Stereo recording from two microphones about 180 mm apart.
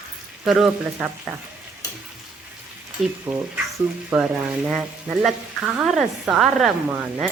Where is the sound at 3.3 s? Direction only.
30° right (ahead or behind).